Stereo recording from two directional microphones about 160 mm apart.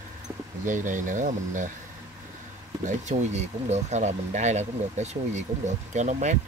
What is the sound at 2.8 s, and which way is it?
Speech, 50° right (ahead or behind).